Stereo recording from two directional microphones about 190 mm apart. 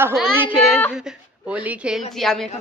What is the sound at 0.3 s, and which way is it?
Child singing, 5° right (ahead or behind).